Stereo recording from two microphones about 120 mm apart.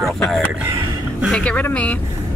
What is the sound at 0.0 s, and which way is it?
Speech, centre (ahead or behind).